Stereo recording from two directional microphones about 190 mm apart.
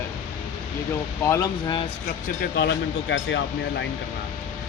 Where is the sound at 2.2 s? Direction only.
55° left (ahead or behind); by 3.9 s 70° left (ahead or behind).